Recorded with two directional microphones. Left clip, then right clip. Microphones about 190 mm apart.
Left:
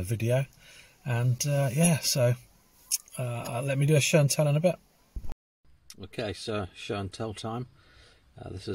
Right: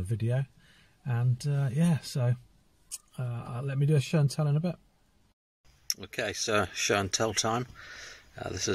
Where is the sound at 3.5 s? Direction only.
50° right (ahead or behind).